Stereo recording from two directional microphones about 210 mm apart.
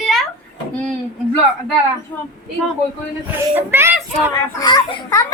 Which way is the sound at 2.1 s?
10° left (ahead or behind).